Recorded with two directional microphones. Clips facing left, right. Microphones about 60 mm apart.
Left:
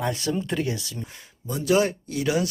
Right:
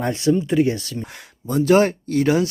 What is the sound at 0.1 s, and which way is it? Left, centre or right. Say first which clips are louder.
Speech: right 9 dB; right.